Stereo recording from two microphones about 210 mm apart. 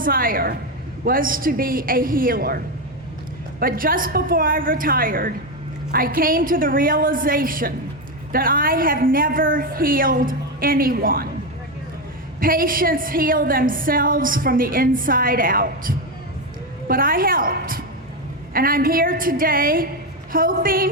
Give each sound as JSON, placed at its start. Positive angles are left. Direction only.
{"t": 0.0, "sound": "a woman's voice", "side_deg": -40}
{"t": 3.6, "sound": "a woman's voice", "side_deg": -40}
{"t": 12.4, "sound": "a woman's voice", "side_deg": -40}